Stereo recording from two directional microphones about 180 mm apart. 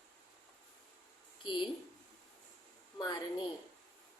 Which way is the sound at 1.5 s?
25° left (ahead or behind).